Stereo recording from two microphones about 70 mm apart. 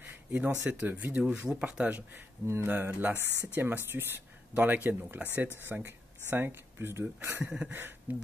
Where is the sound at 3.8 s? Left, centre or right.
Right.